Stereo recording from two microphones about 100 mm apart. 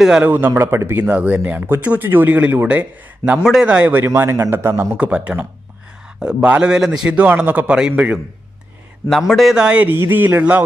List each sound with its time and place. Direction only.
0.2 s a man's voice: 20° right (ahead or behind)
4.0 s a man's voice: 25° right (ahead or behind)
4.9 s speech: 15° right (ahead or behind)
9.3 s speech: 5° right (ahead or behind)
9.8 s a man's voice: 20° right (ahead or behind)